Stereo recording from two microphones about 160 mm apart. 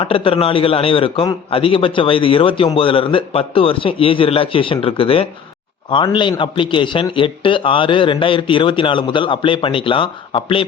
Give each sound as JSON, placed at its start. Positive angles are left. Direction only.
{"t": 0.0, "sound": "a man's voice", "side_deg": 35}